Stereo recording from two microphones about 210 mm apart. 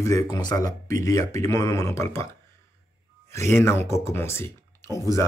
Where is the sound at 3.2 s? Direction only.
10° left (ahead or behind).